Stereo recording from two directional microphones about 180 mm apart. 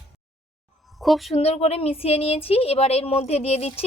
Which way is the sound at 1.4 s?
35° left (ahead or behind).